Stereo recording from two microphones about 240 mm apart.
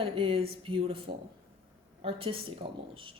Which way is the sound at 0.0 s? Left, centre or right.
Right.